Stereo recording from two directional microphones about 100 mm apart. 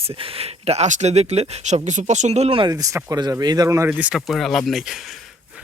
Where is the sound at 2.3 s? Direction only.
80° right.